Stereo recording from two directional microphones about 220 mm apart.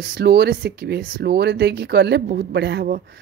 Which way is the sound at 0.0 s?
45° right (ahead or behind).